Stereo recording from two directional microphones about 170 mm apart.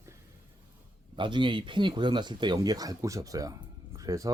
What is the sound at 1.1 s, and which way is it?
Speech, 30° right (ahead or behind).